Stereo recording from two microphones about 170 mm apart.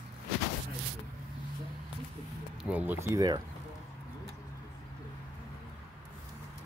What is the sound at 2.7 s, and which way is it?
Speech, 10° right (ahead or behind).